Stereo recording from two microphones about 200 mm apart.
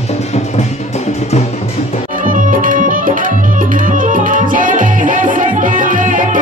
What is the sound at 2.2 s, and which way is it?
Music, 40° right (ahead or behind).